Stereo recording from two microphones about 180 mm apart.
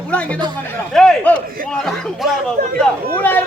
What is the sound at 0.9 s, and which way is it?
Speech, 5° left (ahead or behind).